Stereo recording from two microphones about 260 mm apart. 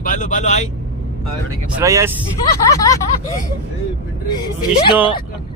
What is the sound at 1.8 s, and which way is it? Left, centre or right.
Speech, centre.